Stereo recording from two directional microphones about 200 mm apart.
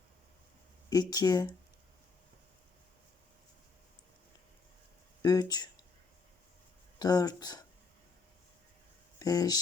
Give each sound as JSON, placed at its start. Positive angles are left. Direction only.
{"t": 0.9, "sound": "speech", "side_deg": 20}
{"t": 5.2, "sound": "speech", "side_deg": 20}
{"t": 7.0, "sound": "speech", "side_deg": 20}
{"t": 9.1, "sound": "speech", "side_deg": 20}